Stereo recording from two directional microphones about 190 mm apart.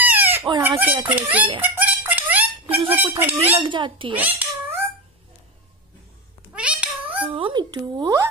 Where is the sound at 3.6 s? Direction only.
25° right (ahead or behind).